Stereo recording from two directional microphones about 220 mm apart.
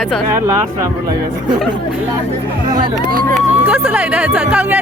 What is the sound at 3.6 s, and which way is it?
Speech, 5° right (ahead or behind).